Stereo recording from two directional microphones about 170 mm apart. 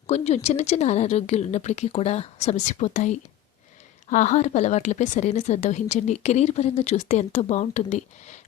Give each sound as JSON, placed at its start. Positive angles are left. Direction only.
{"t": 0.1, "sound": "a woman's voice", "side_deg": 40}